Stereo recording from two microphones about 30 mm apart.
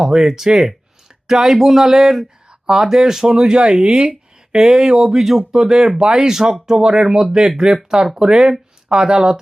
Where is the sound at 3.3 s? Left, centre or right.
Right.